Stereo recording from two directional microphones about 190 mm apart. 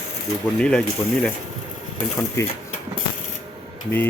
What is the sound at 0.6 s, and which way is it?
Speech, 5° left (ahead or behind).